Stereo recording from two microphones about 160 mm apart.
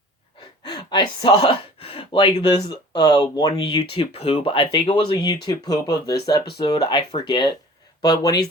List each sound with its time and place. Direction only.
0.6 s speech: 25° left (ahead or behind)
3.8 s speech: 35° left (ahead or behind)
5.1 s speech: 25° left (ahead or behind)